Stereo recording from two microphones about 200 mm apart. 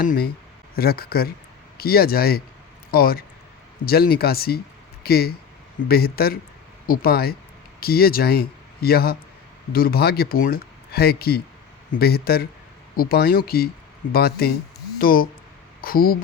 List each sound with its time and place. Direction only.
0.0 s speech: 40° left (ahead or behind)